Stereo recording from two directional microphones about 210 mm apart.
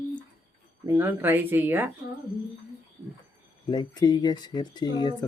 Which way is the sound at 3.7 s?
20° left (ahead or behind).